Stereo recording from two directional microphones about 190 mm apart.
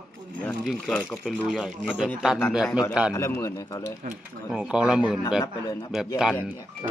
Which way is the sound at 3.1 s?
15° left (ahead or behind).